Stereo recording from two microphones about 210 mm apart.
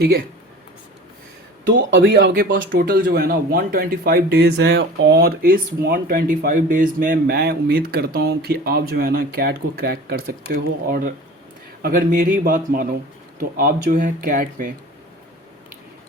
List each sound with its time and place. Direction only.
1.9 s speech: 55° right (ahead or behind)